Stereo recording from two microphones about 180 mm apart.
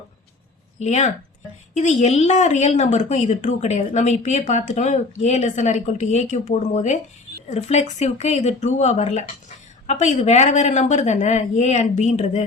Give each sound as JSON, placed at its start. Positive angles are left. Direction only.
{"t": 0.8, "sound": "a woman's voice", "side_deg": 40}